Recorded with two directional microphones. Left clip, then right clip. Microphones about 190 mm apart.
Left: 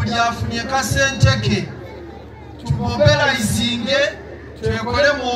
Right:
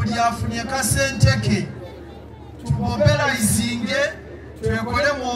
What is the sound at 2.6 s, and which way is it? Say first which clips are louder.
Speech: left 4 dB; 15° right (ahead or behind).